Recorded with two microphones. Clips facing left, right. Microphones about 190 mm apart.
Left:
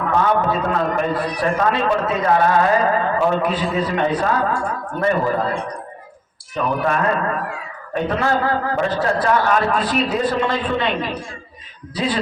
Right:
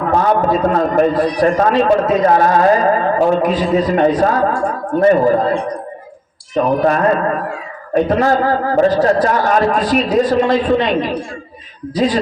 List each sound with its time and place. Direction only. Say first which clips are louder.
0.1 s a man's voice: right 4 dB; 40° right (ahead or behind)
6.6 s a man's voice: right 6 dB; 40° right (ahead or behind)